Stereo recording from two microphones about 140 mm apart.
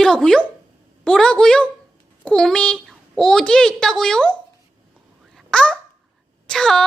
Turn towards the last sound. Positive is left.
turn(degrees=5)  # may be behind; listen again after turning